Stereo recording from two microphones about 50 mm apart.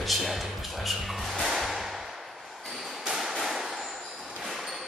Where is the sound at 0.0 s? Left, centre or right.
Centre.